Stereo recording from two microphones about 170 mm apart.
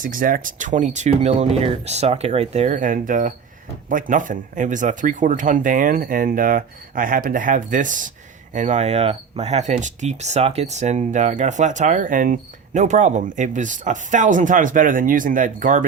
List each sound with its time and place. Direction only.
0.0 s speech: 55° right (ahead or behind)